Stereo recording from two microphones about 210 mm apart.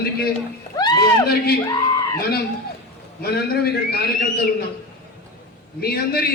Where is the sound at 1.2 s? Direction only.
45° left (ahead or behind).